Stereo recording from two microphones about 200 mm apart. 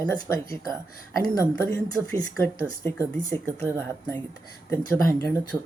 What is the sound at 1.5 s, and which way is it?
Speech, 10° left (ahead or behind).